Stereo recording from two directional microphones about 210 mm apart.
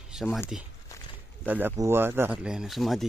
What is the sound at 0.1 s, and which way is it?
Speech, 5° right (ahead or behind).